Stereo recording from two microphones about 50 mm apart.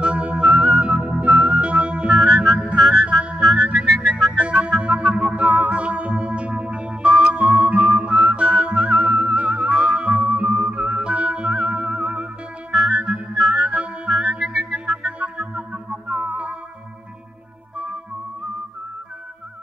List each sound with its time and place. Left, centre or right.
0.0 s music: right
1.0 s organ: right
1.3 s music: centre
1.6 s music: right
2.0 s music: centre
3.1 s music: centre
8.2 s whistling: right
10.1 s music: right
12.7 s music: centre
14.0 s music: centre; by 16.5 s right